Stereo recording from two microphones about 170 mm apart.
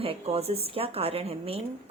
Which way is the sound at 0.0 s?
35° right (ahead or behind).